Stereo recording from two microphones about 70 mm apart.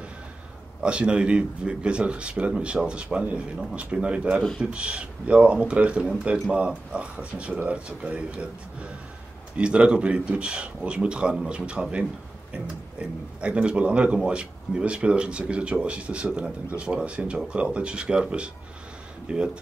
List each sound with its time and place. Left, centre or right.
0.8 s speech: centre